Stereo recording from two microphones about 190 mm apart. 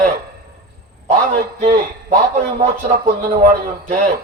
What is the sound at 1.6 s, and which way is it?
A man's voice, 40° right (ahead or behind).